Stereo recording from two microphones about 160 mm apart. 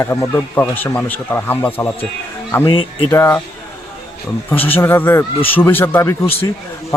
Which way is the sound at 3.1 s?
15° left (ahead or behind).